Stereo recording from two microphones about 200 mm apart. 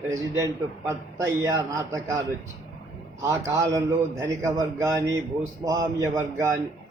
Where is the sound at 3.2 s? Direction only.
15° right (ahead or behind).